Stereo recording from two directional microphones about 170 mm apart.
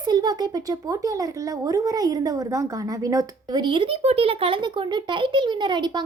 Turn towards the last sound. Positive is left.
turn(degrees=-25)  # may be behind; listen again after turning